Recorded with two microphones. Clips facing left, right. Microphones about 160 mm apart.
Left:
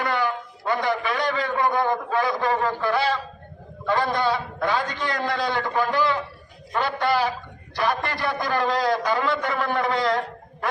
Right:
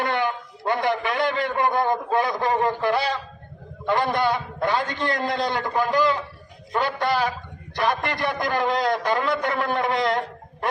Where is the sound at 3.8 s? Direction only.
20° right (ahead or behind).